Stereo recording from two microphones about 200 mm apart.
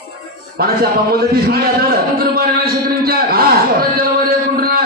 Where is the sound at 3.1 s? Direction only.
50° right (ahead or behind).